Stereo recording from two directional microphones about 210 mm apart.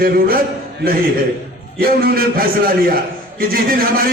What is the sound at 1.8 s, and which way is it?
A man's voice, 45° right (ahead or behind).